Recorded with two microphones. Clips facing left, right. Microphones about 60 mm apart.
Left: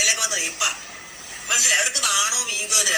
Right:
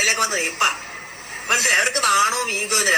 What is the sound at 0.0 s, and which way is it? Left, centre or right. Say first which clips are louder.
A woman's voice: right 5 dB; right.